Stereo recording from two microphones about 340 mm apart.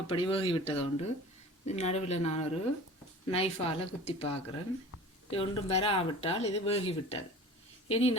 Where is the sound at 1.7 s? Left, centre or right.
Centre.